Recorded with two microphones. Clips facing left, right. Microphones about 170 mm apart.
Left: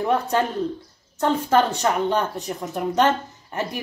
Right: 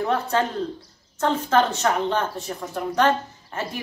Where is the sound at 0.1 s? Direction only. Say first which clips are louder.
Left 3 dB; 15° left (ahead or behind).